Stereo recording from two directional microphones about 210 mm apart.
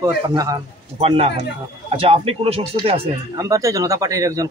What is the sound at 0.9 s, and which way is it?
Speech, 25° right (ahead or behind).